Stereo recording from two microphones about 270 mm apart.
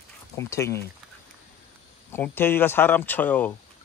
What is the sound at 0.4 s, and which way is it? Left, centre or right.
Speech, centre.